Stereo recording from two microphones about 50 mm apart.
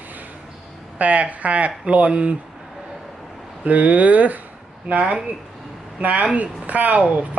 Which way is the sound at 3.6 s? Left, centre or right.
Right.